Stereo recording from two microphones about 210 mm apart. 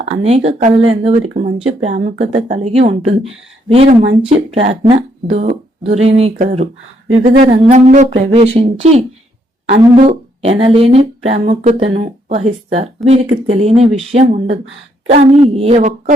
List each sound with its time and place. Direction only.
0.0 s speech: 30° right (ahead or behind)